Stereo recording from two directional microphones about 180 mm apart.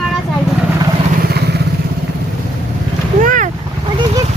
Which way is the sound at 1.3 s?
65° right (ahead or behind).